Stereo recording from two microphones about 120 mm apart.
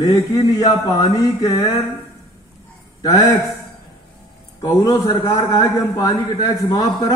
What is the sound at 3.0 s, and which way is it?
Speech, 30° left (ahead or behind).